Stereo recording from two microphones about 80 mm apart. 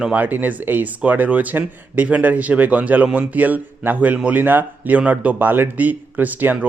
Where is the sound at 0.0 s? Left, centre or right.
Centre.